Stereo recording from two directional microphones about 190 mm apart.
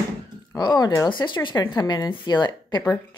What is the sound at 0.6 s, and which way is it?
A woman's voice, 20° left (ahead or behind).